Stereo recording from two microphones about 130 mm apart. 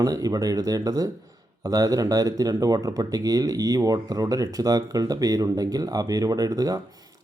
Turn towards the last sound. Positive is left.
turn(degrees=-25)  # may be behind; listen again after turning